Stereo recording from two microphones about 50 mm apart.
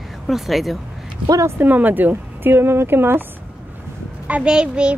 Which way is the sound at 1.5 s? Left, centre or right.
Right.